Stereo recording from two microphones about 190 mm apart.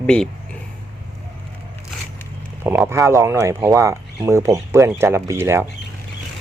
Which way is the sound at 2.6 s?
10° right (ahead or behind).